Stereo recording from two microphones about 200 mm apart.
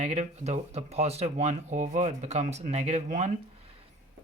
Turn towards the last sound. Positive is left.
turn(degrees=-35)  # may be behind; listen again after turning